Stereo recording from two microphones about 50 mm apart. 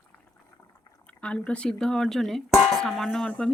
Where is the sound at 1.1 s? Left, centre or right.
Left.